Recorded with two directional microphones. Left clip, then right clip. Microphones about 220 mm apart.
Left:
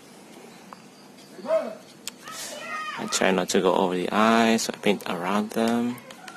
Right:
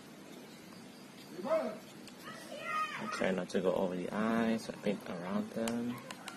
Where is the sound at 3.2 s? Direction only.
35° left (ahead or behind).